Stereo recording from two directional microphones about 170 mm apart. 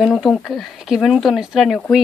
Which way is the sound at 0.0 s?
Centre (ahead or behind).